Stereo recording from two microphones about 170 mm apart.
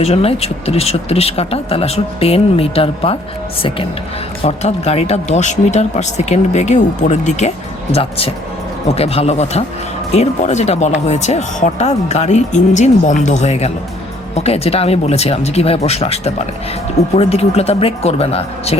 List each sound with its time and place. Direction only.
0.0 s speech: 35° left (ahead or behind)
4.4 s speech: 35° left (ahead or behind)
9.0 s speech: 35° left (ahead or behind)